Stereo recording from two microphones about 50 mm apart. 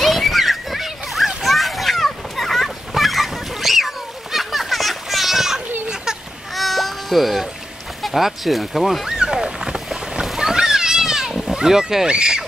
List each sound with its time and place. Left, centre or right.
0.0 s splash: centre
6.5 s music: centre
8.0 s a sound: centre
10.2 s splash: centre
11.5 s speech: centre